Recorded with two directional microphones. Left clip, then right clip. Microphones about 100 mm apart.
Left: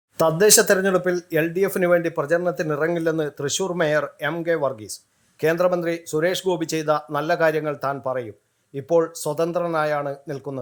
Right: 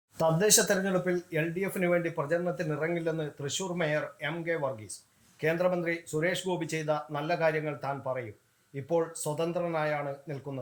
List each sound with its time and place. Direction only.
0.2 s speech: 45° left (ahead or behind)